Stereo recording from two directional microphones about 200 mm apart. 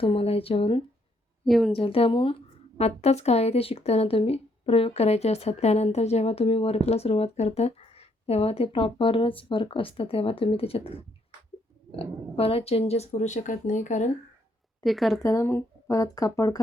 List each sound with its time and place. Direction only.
0.0 s speech: 25° left (ahead or behind)
1.5 s speech: centre (ahead or behind)
1.7 s speech: 30° left (ahead or behind)
14.8 s speech: centre (ahead or behind)
15.2 s speech: 15° left (ahead or behind)